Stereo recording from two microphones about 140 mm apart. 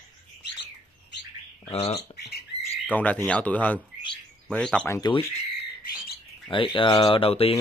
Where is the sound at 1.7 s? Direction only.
45° left (ahead or behind).